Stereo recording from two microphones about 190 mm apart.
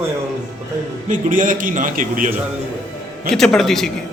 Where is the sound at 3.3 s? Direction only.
Centre (ahead or behind).